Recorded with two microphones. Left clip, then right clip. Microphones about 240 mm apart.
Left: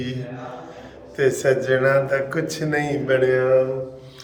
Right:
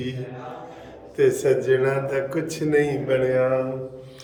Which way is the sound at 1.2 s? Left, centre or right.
Centre.